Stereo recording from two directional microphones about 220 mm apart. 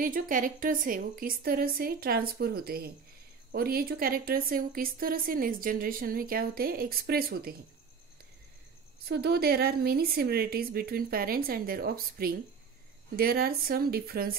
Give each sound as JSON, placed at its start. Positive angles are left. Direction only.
{"t": 0.0, "sound": "a woman's voice", "side_deg": -40}
{"t": 9.1, "sound": "a woman's voice", "side_deg": -45}